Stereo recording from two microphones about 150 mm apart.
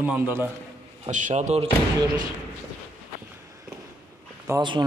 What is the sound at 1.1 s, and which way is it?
Speech, 55° right (ahead or behind).